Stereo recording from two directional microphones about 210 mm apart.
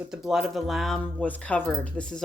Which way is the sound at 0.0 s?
Centre (ahead or behind).